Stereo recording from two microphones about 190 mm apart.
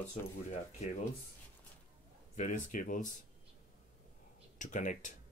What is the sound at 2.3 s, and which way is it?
Speech, 40° left (ahead or behind).